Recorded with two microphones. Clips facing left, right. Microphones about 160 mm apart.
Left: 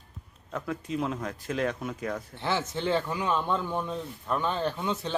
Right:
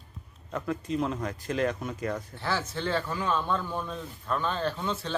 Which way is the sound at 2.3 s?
20° left (ahead or behind).